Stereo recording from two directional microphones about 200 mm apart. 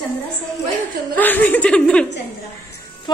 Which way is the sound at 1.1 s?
10° left (ahead or behind).